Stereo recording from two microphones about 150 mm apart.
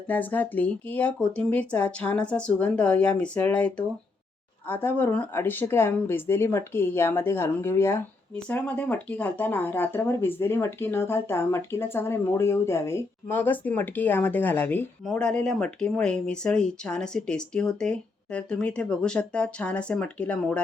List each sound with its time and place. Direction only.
0.1 s speech: 10° left (ahead or behind)